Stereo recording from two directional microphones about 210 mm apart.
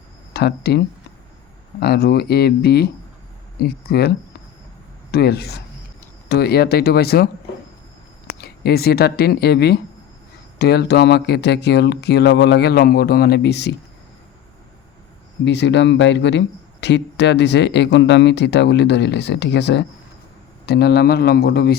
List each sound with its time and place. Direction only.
0.3 s speech: 50° left (ahead or behind)
1.8 s speech: 50° left (ahead or behind)
5.1 s speech: 50° left (ahead or behind)
8.4 s speech: 50° left (ahead or behind)
15.4 s speech: 60° left (ahead or behind)